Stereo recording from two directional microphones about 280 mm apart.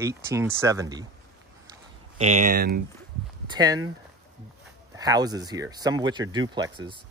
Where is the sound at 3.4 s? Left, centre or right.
Centre.